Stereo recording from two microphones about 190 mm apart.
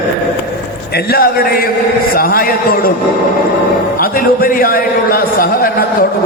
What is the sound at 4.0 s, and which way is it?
A man's voice, 50° left (ahead or behind).